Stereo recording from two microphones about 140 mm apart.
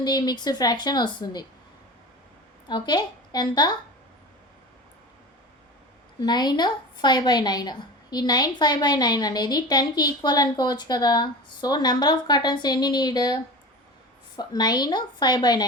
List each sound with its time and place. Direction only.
0.0 s speech: 30° left (ahead or behind)
2.6 s speech: 30° left (ahead or behind)
6.1 s a woman's voice: 30° left (ahead or behind)